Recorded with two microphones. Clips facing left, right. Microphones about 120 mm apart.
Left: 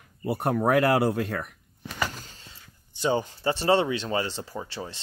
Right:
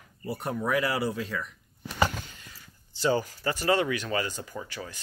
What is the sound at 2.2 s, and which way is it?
Speech, 30° left (ahead or behind).